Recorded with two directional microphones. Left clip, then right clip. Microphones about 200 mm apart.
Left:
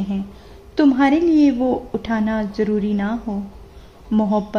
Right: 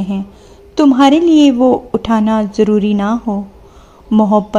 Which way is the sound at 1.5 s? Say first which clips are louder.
Right 9 dB; 20° right (ahead or behind).